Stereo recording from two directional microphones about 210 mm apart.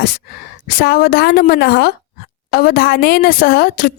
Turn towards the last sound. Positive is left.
turn(degrees=45)  # may be behind; listen again after turning